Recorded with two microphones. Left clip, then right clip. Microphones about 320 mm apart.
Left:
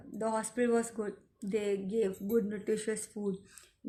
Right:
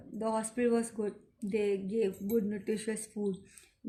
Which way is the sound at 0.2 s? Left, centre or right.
Centre.